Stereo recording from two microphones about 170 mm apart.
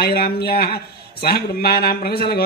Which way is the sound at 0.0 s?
65° left (ahead or behind).